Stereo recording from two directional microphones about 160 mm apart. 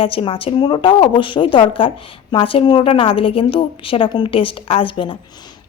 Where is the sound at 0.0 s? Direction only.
35° left (ahead or behind).